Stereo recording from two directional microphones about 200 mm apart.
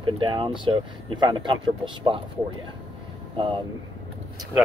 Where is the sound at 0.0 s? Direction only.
25° right (ahead or behind).